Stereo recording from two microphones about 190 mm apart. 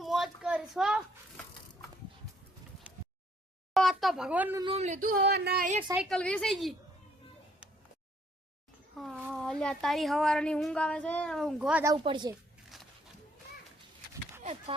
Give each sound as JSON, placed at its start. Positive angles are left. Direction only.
{"t": 0.0, "sound": "a sound", "side_deg": 0}
{"t": 3.8, "sound": "a sound", "side_deg": 0}
{"t": 4.6, "sound": "speech", "side_deg": -35}
{"t": 5.9, "sound": "a woman's voice", "side_deg": 0}
{"t": 9.0, "sound": "speech", "side_deg": 0}
{"t": 12.0, "sound": "speech", "side_deg": -25}